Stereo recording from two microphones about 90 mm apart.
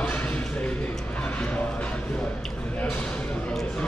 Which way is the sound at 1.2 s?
15° left (ahead or behind).